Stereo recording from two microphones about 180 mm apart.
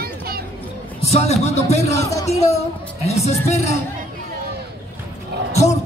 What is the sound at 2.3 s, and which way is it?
Speech, 35° left (ahead or behind).